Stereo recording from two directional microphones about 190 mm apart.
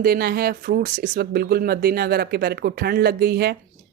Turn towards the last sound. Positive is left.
turn(degrees=-55)  # may be behind; listen again after turning